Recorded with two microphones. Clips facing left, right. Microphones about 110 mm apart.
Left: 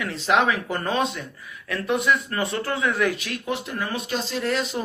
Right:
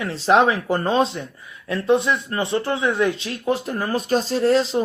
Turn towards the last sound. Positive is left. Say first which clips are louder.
# right 8 dB
turn(degrees=-30)  # may be behind; listen again after turning